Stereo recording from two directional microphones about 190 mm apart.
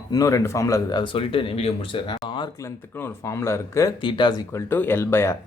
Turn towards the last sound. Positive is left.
turn(degrees=15)  # may be behind; listen again after turning